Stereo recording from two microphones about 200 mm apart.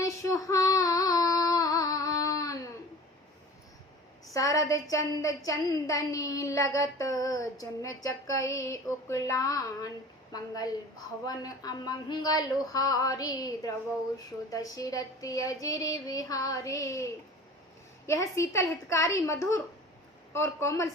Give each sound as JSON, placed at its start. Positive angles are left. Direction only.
{"t": 0.0, "sound": "female singing", "side_deg": 15}
{"t": 4.4, "sound": "a woman's voice", "side_deg": 15}